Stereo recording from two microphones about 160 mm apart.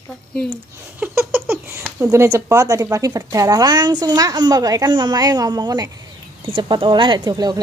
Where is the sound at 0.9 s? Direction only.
10° right (ahead or behind).